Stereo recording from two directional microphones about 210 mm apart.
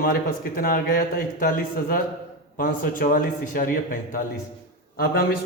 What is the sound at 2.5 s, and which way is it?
A man's voice, 40° left (ahead or behind).